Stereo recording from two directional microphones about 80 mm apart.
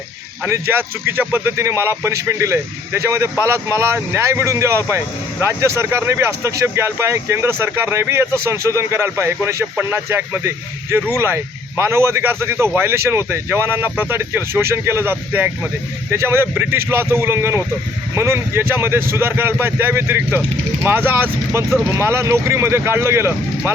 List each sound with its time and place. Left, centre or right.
0.4 s speech: right